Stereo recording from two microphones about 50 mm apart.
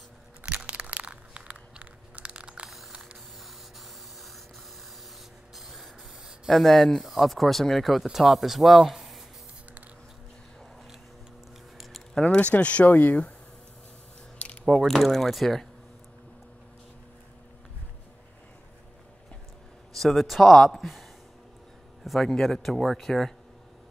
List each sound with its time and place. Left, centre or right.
0.5 s crunch: centre
5.6 s spray: centre
6.5 s speech: centre
12.1 s speech: centre
14.7 s speech: centre
20.0 s speech: centre
22.0 s a man's voice: centre